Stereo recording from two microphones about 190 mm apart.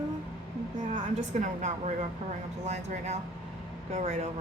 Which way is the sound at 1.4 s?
40° right (ahead or behind).